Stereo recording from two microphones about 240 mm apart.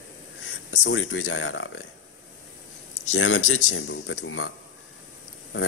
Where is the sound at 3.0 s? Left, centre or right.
Left.